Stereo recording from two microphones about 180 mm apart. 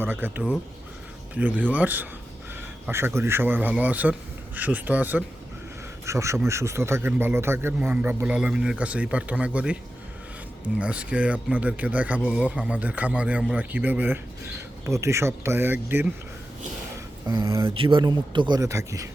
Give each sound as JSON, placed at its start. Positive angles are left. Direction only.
{"t": 0.0, "sound": "speech", "side_deg": -10}
{"t": 10.8, "sound": "speech", "side_deg": -5}
{"t": 17.2, "sound": "speech", "side_deg": -15}
{"t": 17.7, "sound": "a man's voice", "side_deg": -30}